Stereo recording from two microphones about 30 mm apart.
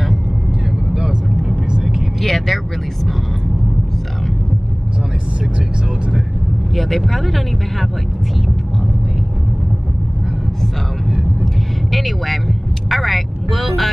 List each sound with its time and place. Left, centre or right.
0.9 s vehicle: centre
2.2 s speech: centre
6.7 s speech: centre
11.9 s speech: centre